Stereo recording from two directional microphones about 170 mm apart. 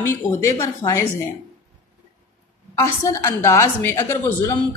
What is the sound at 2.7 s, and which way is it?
A woman's voice, 20° left (ahead or behind).